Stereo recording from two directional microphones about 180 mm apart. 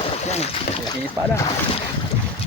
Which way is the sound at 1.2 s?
15° right (ahead or behind).